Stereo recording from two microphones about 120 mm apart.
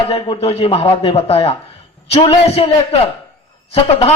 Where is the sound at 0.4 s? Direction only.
55° left (ahead or behind).